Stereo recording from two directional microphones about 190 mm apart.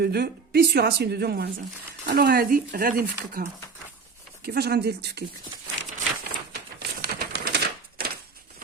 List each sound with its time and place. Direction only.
0.0 s speech: 55° right (ahead or behind)
4.4 s speech: 55° right (ahead or behind)
6.5 s typewriter: 55° right (ahead or behind)